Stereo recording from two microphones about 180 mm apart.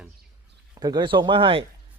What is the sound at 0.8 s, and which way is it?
Speech, 25° right (ahead or behind).